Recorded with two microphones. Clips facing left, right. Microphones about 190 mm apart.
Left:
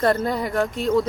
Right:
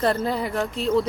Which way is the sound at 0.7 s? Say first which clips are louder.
Even; 30° right (ahead or behind).